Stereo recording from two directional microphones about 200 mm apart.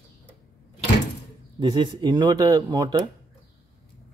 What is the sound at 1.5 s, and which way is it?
Speech, 25° right (ahead or behind).